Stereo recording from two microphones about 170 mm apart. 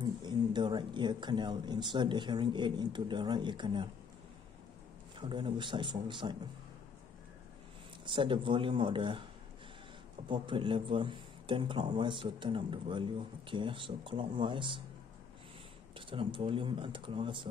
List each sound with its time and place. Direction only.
0.0 s speech: 25° right (ahead or behind)
5.2 s speech: 30° right (ahead or behind)
8.0 s speech: 30° right (ahead or behind)
10.2 s speech: 30° right (ahead or behind)
16.1 s speech: 30° right (ahead or behind)